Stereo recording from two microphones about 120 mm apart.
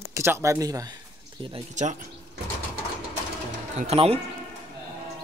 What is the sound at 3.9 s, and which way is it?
Speech, 55° right (ahead or behind).